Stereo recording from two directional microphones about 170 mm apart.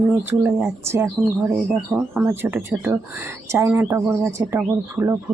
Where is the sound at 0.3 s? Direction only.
15° right (ahead or behind).